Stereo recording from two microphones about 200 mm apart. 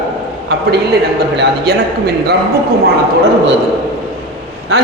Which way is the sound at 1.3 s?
60° right (ahead or behind).